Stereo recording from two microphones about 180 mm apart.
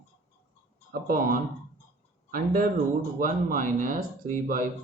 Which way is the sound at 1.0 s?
50° right (ahead or behind).